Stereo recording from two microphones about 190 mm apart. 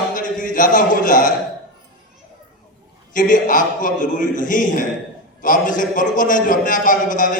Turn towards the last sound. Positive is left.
turn(degrees=45)  # may be behind; listen again after turning